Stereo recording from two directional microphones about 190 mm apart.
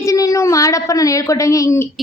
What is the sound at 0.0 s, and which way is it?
A woman's voice, 15° left (ahead or behind).